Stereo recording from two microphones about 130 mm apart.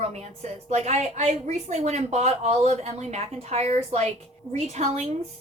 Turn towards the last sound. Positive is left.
turn(degrees=-55)  # may be behind; listen again after turning